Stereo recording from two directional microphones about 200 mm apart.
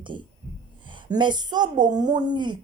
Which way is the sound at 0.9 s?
25° right (ahead or behind).